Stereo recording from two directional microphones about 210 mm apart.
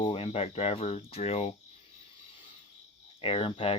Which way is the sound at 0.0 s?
25° left (ahead or behind).